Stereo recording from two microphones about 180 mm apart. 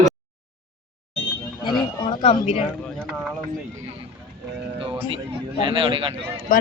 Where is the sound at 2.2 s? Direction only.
35° left (ahead or behind).